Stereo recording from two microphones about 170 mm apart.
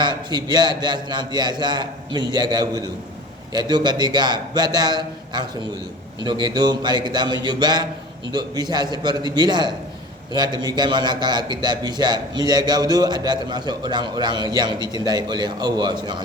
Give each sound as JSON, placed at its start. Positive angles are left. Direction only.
{"t": 0.0, "sound": "a man's voice", "side_deg": -25}